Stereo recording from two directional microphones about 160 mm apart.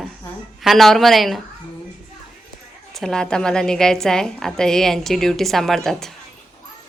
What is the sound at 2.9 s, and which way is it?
A woman's voice, 5° left (ahead or behind).